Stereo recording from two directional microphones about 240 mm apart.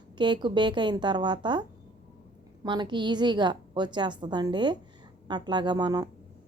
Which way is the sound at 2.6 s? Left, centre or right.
Centre.